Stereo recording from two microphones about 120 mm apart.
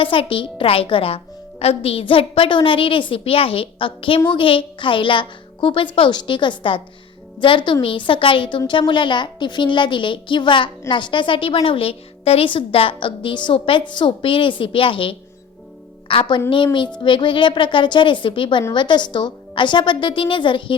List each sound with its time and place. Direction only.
0.0 s a woman's voice: 45° left (ahead or behind)